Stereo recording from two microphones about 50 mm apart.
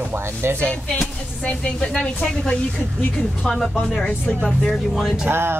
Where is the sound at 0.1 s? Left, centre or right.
Right.